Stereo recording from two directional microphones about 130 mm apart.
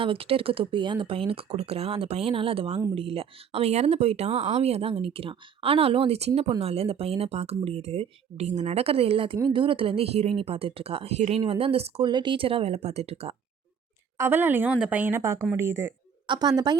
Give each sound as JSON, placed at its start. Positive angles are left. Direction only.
{"t": 0.0, "sound": "speech", "side_deg": -45}
{"t": 14.2, "sound": "a woman's voice", "side_deg": -15}
{"t": 16.2, "sound": "a woman's voice", "side_deg": -35}